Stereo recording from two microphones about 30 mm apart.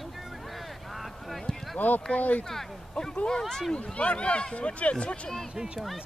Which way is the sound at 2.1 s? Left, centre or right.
Left.